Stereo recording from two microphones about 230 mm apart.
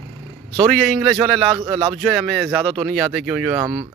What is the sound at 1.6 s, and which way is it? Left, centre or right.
Speech, right.